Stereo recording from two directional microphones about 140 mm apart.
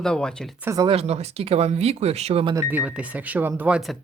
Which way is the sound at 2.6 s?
15° right (ahead or behind).